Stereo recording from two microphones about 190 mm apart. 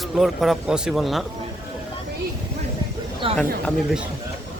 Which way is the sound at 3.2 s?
30° right (ahead or behind).